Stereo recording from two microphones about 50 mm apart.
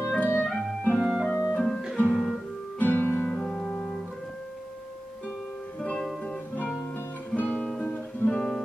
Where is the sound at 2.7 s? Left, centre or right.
Left.